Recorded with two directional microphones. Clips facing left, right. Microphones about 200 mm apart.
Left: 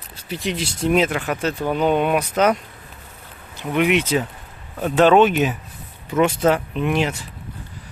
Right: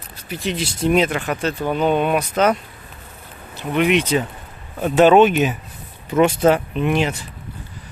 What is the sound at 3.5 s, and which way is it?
Speech, 10° left (ahead or behind).